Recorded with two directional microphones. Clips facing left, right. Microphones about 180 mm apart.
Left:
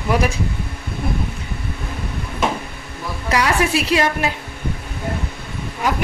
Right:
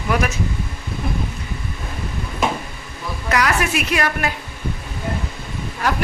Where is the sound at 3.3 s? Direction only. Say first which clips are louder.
Left 2 dB; 30° left (ahead or behind).